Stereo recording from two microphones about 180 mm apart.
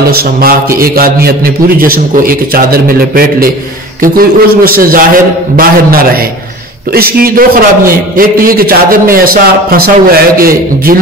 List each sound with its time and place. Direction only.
0.1 s a man's voice: 55° right (ahead or behind)